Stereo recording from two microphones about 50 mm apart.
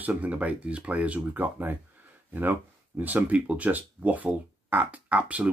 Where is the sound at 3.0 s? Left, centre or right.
Right.